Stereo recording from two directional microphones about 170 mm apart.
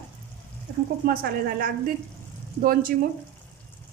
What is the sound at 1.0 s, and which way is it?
A woman's voice, 60° right (ahead or behind).